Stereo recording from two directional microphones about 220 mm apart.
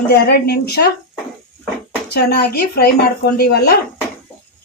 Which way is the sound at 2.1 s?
45° left (ahead or behind).